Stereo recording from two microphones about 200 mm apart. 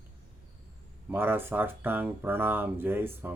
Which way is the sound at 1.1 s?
10° right (ahead or behind).